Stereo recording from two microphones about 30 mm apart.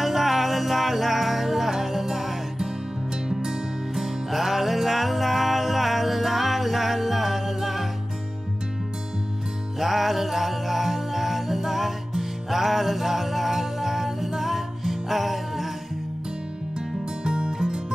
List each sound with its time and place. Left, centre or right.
0.0 s music: centre
3.9 s music: centre
9.8 s music: centre
17.2 s music: right